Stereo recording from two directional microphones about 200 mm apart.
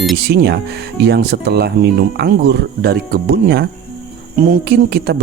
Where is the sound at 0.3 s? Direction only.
55° right (ahead or behind).